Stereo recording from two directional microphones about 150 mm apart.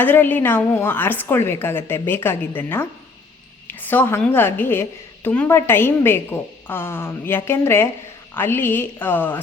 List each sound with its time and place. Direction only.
0.0 s a woman's voice: 15° left (ahead or behind)
3.7 s a sound: 15° left (ahead or behind)
4.2 s a woman's voice: 15° left (ahead or behind)